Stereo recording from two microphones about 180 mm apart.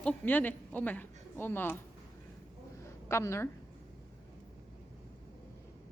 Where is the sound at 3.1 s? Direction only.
15° left (ahead or behind).